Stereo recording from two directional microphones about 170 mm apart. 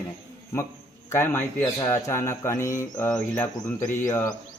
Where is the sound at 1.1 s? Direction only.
15° left (ahead or behind).